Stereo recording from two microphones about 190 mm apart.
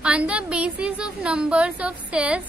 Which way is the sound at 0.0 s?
5° right (ahead or behind).